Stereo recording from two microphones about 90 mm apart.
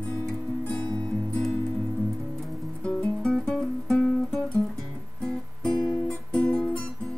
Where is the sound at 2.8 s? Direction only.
10° left (ahead or behind).